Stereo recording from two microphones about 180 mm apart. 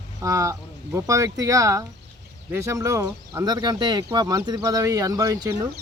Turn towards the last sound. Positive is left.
turn(degrees=-20)  # may be behind; listen again after turning